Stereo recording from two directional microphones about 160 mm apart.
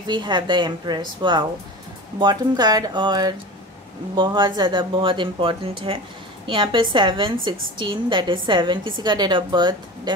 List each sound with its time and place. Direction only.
0.0 s a woman's voice: 30° right (ahead or behind)